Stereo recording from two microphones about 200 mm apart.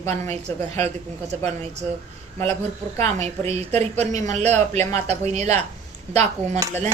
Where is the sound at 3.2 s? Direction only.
35° right (ahead or behind).